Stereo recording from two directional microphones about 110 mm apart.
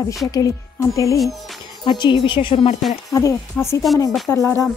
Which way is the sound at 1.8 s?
45° left (ahead or behind).